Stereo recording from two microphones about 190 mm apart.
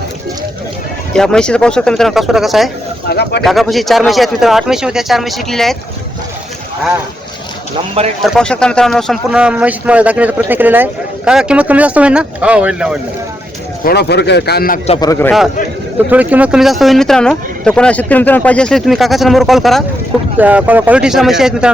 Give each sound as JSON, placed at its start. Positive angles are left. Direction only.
{"t": 1.1, "sound": "speech", "side_deg": 5}
{"t": 3.1, "sound": "speech", "side_deg": 60}
{"t": 3.4, "sound": "speech", "side_deg": 0}
{"t": 8.2, "sound": "speech", "side_deg": 0}
{"t": 13.8, "sound": "speech", "side_deg": 60}
{"t": 15.0, "sound": "a man's voice", "side_deg": 15}
{"t": 16.0, "sound": "speech", "side_deg": -10}